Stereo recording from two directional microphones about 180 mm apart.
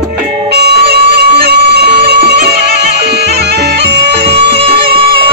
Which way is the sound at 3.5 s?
70° right (ahead or behind).